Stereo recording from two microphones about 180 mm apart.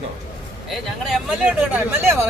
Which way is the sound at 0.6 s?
5° right (ahead or behind).